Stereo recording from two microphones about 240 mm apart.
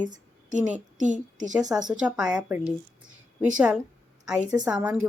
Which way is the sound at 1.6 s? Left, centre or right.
Centre.